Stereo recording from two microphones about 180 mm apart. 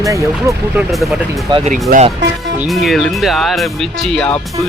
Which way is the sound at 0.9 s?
Centre (ahead or behind).